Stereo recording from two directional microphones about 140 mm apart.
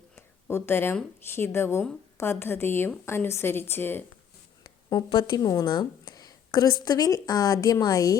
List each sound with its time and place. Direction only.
0.2 s a sound: 15° left (ahead or behind)
1.4 s a woman's voice: 15° left (ahead or behind)
4.6 s speech: 30° left (ahead or behind)